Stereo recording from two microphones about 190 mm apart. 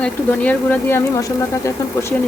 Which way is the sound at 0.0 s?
10° left (ahead or behind).